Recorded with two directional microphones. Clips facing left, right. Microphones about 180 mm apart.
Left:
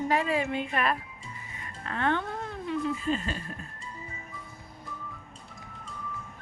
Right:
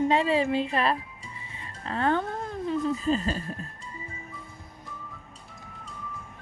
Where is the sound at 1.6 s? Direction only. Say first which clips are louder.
Right 3 dB; 30° right (ahead or behind).